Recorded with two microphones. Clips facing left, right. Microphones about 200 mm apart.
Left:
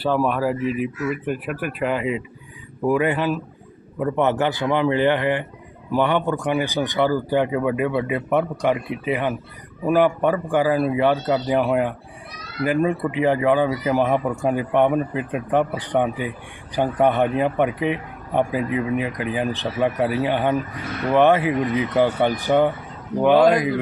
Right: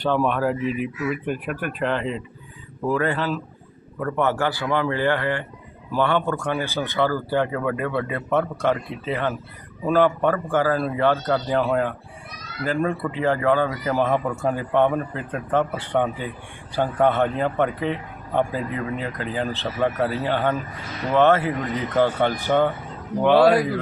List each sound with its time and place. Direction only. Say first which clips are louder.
0.0 s a man's voice: left 1 dB; 5° left (ahead or behind)